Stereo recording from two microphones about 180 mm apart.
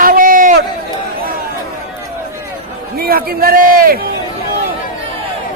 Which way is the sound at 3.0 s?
55° right (ahead or behind).